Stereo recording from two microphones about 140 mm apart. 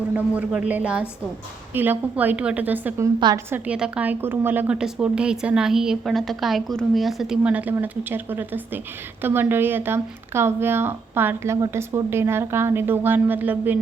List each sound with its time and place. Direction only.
0.1 s a woman's voice: 10° right (ahead or behind)